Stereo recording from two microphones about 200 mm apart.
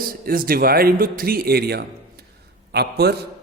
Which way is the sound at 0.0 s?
45° right (ahead or behind).